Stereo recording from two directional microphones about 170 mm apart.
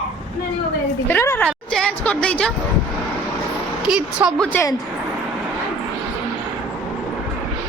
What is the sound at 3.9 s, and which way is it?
Speech, 5° right (ahead or behind).